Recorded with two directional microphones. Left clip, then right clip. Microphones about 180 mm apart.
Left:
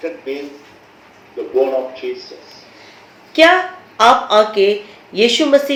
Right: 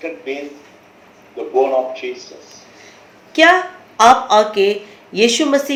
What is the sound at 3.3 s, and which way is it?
A woman's voice, 30° right (ahead or behind).